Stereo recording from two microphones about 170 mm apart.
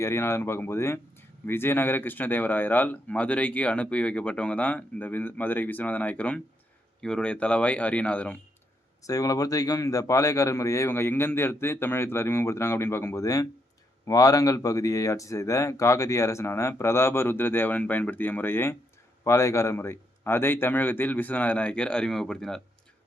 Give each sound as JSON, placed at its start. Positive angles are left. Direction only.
{"t": 0.0, "sound": "speech", "side_deg": 15}
{"t": 9.0, "sound": "speech", "side_deg": 20}